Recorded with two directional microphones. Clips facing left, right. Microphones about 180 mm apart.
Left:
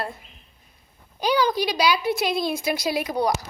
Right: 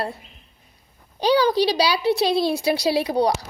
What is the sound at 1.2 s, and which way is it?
Speech, 35° right (ahead or behind).